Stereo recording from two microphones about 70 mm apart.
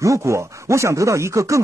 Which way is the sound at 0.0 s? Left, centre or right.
Right.